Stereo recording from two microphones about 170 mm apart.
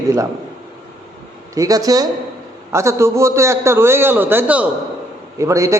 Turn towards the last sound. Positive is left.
turn(degrees=-20)  # may be behind; listen again after turning